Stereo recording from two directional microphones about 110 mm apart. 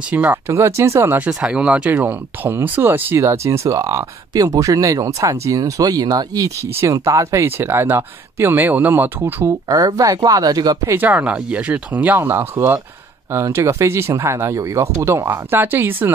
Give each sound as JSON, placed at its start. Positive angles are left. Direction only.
{"t": 0.1, "sound": "speech", "side_deg": -15}
{"t": 0.5, "sound": "speech", "side_deg": -25}
{"t": 9.7, "sound": "speech", "side_deg": -35}
{"t": 11.0, "sound": "speech", "side_deg": -15}